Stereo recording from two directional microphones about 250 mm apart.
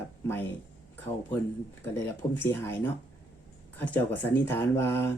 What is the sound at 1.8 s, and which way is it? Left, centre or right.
Speech, centre.